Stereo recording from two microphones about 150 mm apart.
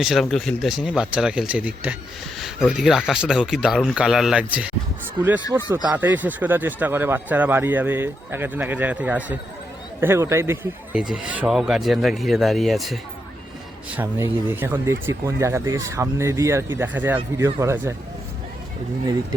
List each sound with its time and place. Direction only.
0.0 s speech: centre (ahead or behind)
5.5 s speech: 15° right (ahead or behind)
10.9 s speech: 5° right (ahead or behind)
13.9 s speech: 15° right (ahead or behind)